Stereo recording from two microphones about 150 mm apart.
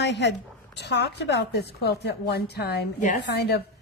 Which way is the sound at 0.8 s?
90° left.